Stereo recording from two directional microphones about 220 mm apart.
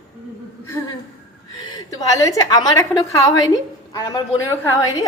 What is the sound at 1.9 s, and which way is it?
A woman's voice, 15° left (ahead or behind).